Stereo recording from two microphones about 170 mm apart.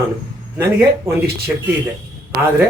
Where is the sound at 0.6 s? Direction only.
15° right (ahead or behind).